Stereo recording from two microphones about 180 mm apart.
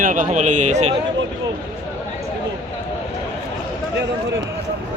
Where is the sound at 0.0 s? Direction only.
50° right (ahead or behind).